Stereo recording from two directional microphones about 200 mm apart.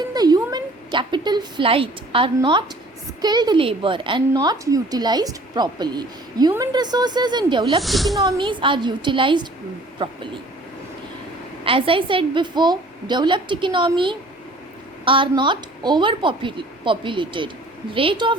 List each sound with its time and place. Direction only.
0.1 s a sound: 20° right (ahead or behind)
3.2 s a woman's voice: 20° right (ahead or behind)
7.8 s speech: centre (ahead or behind)
8.4 s a woman's voice: 25° right (ahead or behind)
11.6 s a woman's voice: 25° right (ahead or behind)